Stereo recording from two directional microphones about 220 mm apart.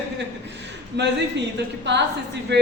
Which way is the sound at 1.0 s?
50° right (ahead or behind).